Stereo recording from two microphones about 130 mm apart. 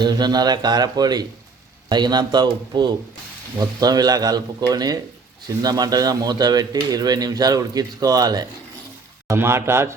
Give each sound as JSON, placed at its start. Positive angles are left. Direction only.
{"t": 0.0, "sound": "a man's voice", "side_deg": -35}
{"t": 9.2, "sound": "speech", "side_deg": -20}